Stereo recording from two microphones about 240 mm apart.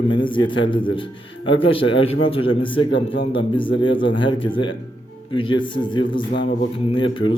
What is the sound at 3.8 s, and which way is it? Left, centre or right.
A man's voice, left.